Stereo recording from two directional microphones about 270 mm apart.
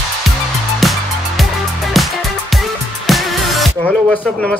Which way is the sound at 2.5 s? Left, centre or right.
Centre.